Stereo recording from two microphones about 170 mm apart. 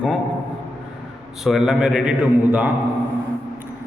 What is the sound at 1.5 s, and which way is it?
A man's voice, centre (ahead or behind).